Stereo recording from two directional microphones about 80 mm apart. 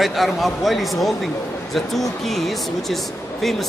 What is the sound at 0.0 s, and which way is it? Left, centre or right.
A man's voice, centre.